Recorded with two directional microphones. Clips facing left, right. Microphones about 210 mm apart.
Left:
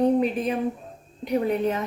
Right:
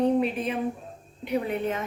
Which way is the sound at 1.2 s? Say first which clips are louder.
Left 4 dB; 40° left (ahead or behind).